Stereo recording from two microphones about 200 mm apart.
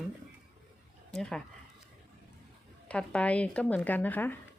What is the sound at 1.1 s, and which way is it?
Speech, 5° left (ahead or behind).